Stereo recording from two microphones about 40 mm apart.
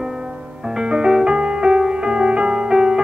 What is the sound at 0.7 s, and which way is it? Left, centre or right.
Music, right.